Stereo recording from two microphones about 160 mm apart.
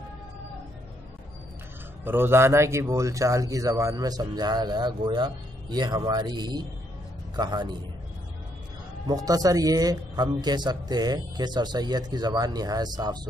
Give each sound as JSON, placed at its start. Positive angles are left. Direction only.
{"t": 2.0, "sound": "speech", "side_deg": -15}
{"t": 9.0, "sound": "speech", "side_deg": -25}